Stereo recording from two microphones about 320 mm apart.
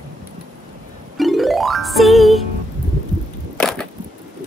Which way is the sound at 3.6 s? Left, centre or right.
Centre.